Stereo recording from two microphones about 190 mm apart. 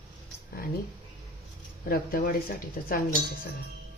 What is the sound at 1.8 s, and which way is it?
Speech, 50° left (ahead or behind).